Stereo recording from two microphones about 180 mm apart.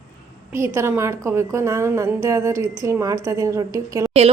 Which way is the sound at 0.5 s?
15° right (ahead or behind).